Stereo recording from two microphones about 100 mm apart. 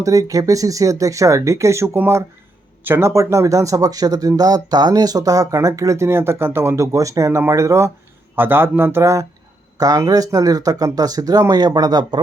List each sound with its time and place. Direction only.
0.0 s speech: 35° right (ahead or behind)
9.7 s speech: 40° right (ahead or behind)